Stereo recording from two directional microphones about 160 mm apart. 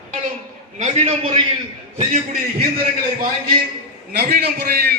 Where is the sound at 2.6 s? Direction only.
65° right (ahead or behind).